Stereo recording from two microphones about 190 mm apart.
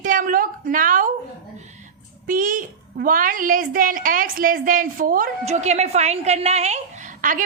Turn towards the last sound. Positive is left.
turn(degrees=-45)  # may be behind; listen again after turning